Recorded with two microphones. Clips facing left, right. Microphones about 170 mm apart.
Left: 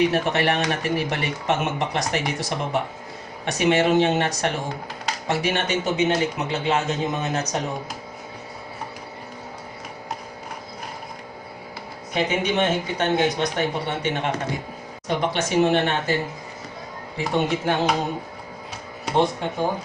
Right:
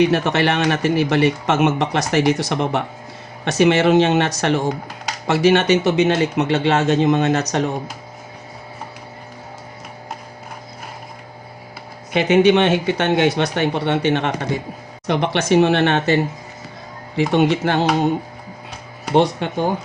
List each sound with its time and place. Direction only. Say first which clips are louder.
0.1 s speech: right 4 dB; 85° right
3.4 s speech: right 5 dB; 90° right
12.1 s speech: right 9 dB; 80° right
15.0 s speech: right 5 dB; 75° right (ahead or behind); by 16.1 s 90° right
17.2 s speech: right 7 dB; 85° right
19.1 s speech: right 5 dB; 75° right (ahead or behind)